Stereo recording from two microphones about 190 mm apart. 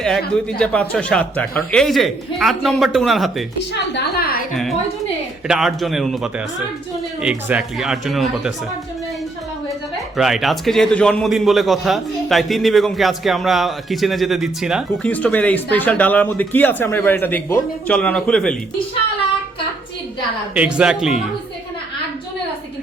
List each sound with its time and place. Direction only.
0.6 s a man's voice: 5° left (ahead or behind)
3.6 s a woman's voice: 65° left (ahead or behind)
4.5 s a man's voice: centre (ahead or behind)
10.2 s a man's voice: centre (ahead or behind)
15.0 s speech: 5° left (ahead or behind)
20.5 s a man's voice: 5° right (ahead or behind)